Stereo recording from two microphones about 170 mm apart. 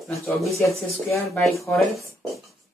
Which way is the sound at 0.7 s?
15° left (ahead or behind).